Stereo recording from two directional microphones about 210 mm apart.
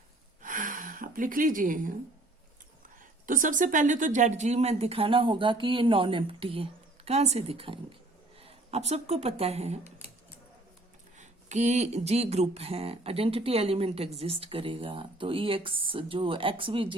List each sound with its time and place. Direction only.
0.4 s gasp: 40° right (ahead or behind)
3.2 s speech: 40° right (ahead or behind)
11.2 s speech: 35° right (ahead or behind)